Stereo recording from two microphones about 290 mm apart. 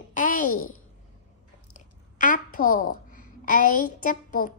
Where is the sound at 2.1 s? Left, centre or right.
Left.